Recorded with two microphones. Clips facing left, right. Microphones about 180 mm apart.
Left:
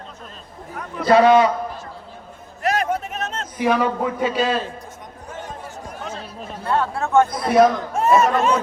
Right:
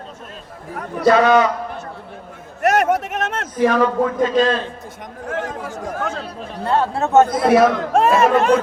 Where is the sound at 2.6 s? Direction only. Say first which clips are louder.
Right 5 dB; 70° right (ahead or behind).